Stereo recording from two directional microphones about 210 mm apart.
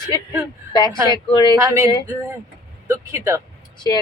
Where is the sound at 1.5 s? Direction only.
15° right (ahead or behind).